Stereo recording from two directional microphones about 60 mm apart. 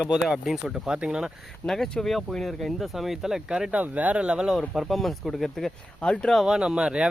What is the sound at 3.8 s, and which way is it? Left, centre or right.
Speech, right.